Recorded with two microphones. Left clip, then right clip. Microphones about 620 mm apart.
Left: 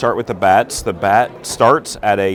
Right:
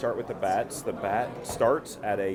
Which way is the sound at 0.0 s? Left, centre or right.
Left.